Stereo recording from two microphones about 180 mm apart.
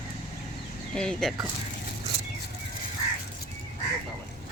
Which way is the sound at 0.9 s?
5° left (ahead or behind).